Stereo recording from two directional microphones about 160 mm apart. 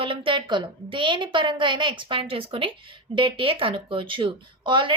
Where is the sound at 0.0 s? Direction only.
35° right (ahead or behind).